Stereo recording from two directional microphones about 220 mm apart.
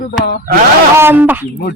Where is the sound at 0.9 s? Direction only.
10° right (ahead or behind).